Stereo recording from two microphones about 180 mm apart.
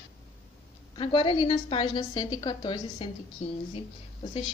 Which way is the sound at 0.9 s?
25° left (ahead or behind).